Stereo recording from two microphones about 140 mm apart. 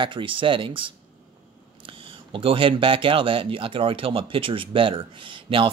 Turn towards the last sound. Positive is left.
turn(degrees=-40)  # may be behind; listen again after turning